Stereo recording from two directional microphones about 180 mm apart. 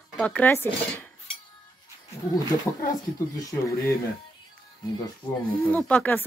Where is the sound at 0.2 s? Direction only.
10° left (ahead or behind).